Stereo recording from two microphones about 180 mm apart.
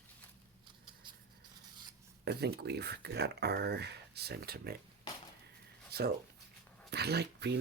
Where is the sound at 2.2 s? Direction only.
65° right (ahead or behind).